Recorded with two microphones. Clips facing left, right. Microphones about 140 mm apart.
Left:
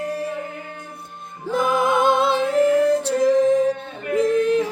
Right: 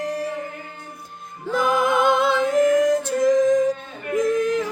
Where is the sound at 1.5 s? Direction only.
25° left (ahead or behind).